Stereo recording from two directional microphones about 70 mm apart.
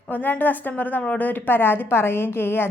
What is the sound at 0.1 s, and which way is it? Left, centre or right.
A woman's voice, left.